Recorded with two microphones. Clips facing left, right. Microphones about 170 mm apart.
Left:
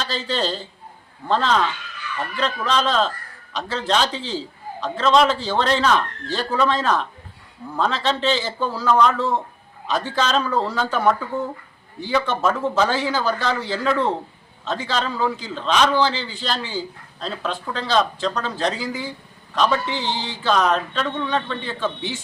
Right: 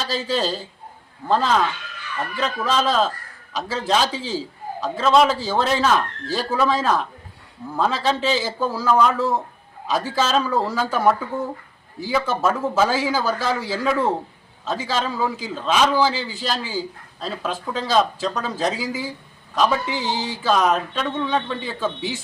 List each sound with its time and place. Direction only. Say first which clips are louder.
0.0 s a man's voice: right 1 dB; 5° right (ahead or behind)
11.9 s a man's voice: even; 5° right (ahead or behind)
20.1 s music: right 2 dB; 40° right (ahead or behind)
20.4 s a man's voice: even; 5° right (ahead or behind)